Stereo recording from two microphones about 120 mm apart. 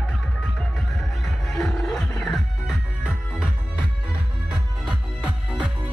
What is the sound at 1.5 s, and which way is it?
Music, 5° left (ahead or behind).